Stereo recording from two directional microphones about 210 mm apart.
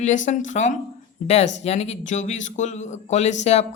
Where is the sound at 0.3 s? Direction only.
35° left (ahead or behind).